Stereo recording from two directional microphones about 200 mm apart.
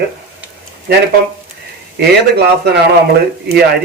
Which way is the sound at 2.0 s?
55° right (ahead or behind).